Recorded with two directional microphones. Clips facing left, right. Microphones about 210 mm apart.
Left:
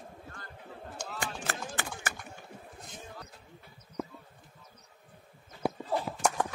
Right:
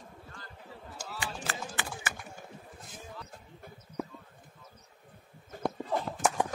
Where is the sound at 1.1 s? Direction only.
50° left (ahead or behind).